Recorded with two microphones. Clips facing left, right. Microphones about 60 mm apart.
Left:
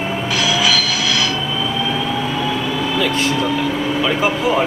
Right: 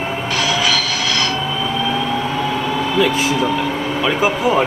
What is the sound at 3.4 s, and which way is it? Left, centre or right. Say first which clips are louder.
Vehicle: even; right.